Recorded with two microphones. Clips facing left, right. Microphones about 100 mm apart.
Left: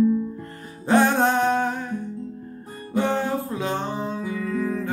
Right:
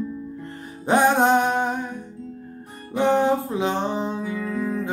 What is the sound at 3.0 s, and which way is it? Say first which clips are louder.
Music: right 4 dB; 20° right (ahead or behind).